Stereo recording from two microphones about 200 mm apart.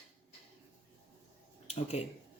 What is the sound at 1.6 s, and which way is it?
Speech, 30° left (ahead or behind).